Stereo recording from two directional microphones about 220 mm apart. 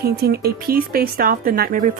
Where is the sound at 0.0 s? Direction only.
45° right (ahead or behind).